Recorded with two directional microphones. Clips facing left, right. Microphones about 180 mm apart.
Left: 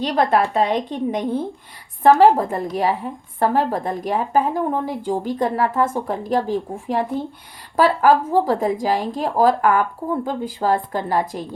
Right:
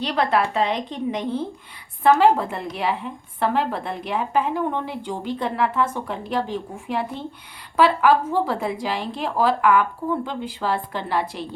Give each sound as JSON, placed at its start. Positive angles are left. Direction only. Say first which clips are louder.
{"t": 0.0, "sound": "a woman's voice", "louder": "left 3 dB", "side_deg": 45}
{"t": 2.0, "sound": "a woman's voice", "louder": "left 4 dB", "side_deg": 40}